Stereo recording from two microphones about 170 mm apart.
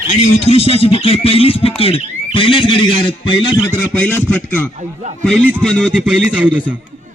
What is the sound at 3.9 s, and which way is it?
Speech, 10° left (ahead or behind).